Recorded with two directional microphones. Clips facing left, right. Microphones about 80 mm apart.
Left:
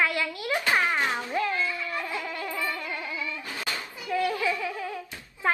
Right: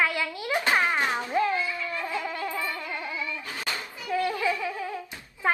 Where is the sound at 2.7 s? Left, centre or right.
Right.